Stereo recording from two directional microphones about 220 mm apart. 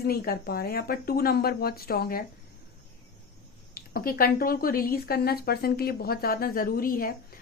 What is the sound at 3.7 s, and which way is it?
A woman's voice, 40° left (ahead or behind).